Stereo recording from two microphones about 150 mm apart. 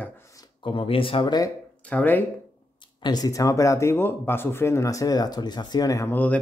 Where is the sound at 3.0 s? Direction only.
25° left (ahead or behind).